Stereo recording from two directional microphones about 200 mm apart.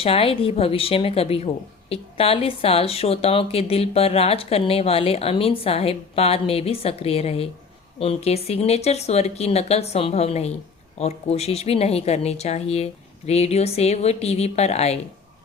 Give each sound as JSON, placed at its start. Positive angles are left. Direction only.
{"t": 0.0, "sound": "speech", "side_deg": 30}